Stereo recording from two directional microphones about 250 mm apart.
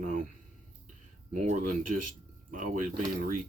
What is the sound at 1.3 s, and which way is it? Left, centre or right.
Speech, right.